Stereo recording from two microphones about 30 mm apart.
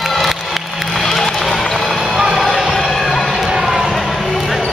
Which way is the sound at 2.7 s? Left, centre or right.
Centre.